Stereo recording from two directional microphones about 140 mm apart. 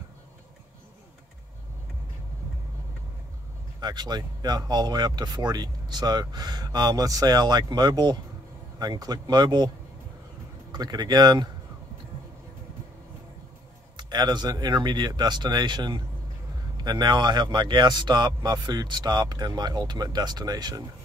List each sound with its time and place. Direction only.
3.8 s speech: 30° right (ahead or behind)
10.7 s speech: 30° right (ahead or behind)
13.9 s speech: 30° right (ahead or behind)